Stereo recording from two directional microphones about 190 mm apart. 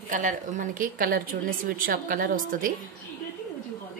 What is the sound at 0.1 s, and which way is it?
Speech, 40° right (ahead or behind).